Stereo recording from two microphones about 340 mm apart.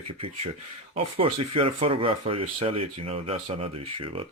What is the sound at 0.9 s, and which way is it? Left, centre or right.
Speech, centre.